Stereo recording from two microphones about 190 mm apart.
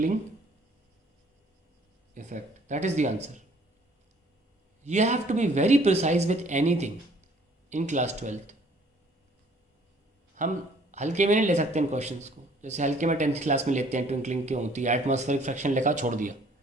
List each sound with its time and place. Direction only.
2.1 s speech: 40° right (ahead or behind)
4.8 s speech: 35° right (ahead or behind)
10.4 s speech: 40° right (ahead or behind)